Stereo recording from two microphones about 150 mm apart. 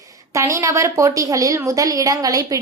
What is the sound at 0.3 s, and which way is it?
A woman's voice, 20° right (ahead or behind).